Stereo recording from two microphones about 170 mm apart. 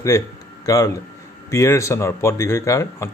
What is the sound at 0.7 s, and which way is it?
A man's voice, 20° left (ahead or behind).